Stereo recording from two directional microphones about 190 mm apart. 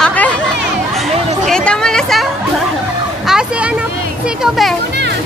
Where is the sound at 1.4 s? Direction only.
5° left (ahead or behind).